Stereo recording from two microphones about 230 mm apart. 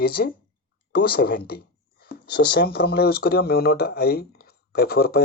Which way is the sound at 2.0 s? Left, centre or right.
Left.